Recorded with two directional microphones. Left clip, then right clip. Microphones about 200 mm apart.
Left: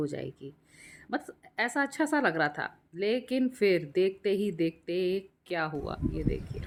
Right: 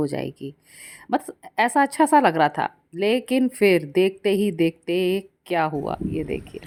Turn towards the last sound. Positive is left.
turn(degrees=-30)  # may be behind; listen again after turning